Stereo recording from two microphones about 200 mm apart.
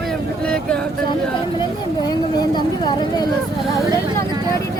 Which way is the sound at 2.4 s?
20° left (ahead or behind).